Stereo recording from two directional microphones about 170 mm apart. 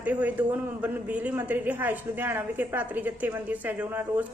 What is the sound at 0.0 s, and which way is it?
A man's voice, 10° right (ahead or behind).